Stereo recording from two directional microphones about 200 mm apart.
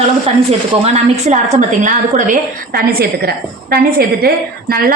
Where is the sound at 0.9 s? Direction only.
35° right (ahead or behind).